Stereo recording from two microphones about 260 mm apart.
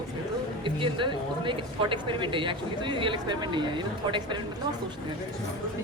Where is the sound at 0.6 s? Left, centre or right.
Centre.